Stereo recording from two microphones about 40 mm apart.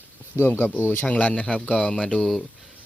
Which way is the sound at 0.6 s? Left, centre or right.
Left.